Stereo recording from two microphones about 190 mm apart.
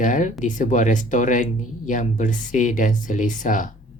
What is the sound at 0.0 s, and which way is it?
Speech, 45° left (ahead or behind).